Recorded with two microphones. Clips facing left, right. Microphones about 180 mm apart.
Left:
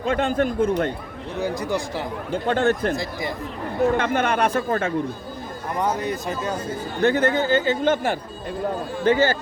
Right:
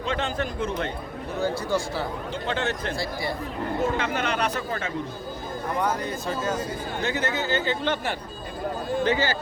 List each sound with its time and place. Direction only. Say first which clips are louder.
0.0 s speech: left 6 dB; 50° left (ahead or behind)
1.4 s speech: left 1 dB; 15° left (ahead or behind)
2.3 s speech: left 10 dB; 50° left (ahead or behind)
2.9 s speech: left 2 dB; 20° left (ahead or behind)
3.9 s speech: left 5 dB; 50° left (ahead or behind)
5.8 s speech: left 5 dB; 20° left (ahead or behind)
7.0 s speech: left 9 dB; 55° left (ahead or behind)